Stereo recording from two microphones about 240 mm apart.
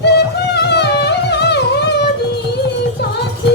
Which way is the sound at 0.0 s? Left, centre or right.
Left.